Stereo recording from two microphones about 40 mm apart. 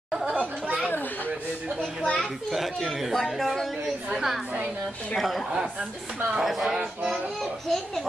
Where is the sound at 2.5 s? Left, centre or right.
Centre.